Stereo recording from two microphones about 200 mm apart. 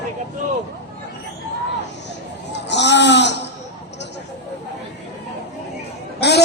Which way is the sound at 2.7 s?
60° left (ahead or behind).